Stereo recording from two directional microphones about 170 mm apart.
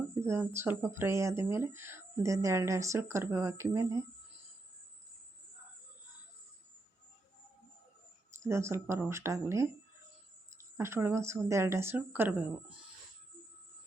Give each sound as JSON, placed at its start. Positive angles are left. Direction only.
{"t": 0.2, "sound": "speech", "side_deg": -15}
{"t": 8.4, "sound": "speech", "side_deg": -15}
{"t": 10.8, "sound": "speech", "side_deg": -15}